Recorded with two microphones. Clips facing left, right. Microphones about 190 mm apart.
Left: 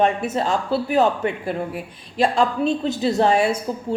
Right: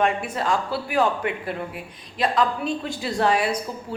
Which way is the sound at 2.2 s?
25° left (ahead or behind).